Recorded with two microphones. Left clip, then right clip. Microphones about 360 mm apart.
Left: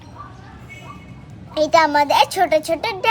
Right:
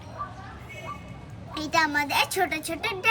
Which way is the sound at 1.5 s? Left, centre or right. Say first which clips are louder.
Left 10 dB; centre.